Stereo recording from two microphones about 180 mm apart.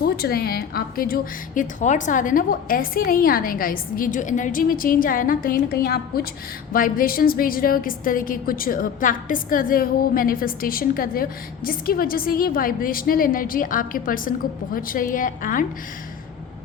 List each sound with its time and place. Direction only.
0.0 s a woman's voice: 60° left (ahead or behind)